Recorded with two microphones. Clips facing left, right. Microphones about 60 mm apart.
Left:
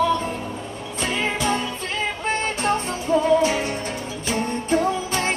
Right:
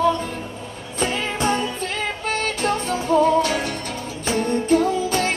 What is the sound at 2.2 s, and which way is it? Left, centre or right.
Music, left.